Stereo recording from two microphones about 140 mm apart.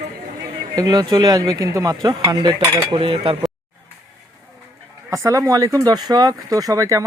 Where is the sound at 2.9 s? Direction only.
40° right (ahead or behind).